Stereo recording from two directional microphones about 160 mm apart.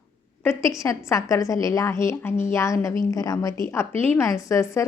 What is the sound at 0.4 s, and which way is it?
A woman's voice, 20° left (ahead or behind).